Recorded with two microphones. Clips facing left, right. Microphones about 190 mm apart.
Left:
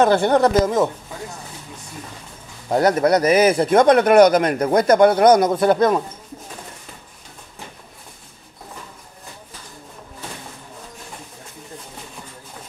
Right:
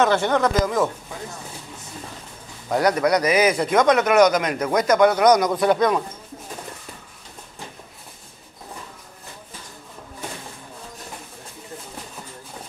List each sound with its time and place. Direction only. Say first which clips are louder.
0.0 s speech: left 4 dB; 35° left (ahead or behind)
2.7 s speech: left 3 dB; 25° left (ahead or behind)
3.3 s speech: left 4 dB; 50° left (ahead or behind)
3.5 s speech: left 4 dB; 30° left (ahead or behind)
5.8 s speech: left 3 dB; 5° left (ahead or behind)